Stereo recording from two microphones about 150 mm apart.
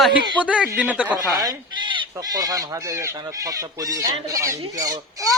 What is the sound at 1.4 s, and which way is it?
Speech, 30° right (ahead or behind).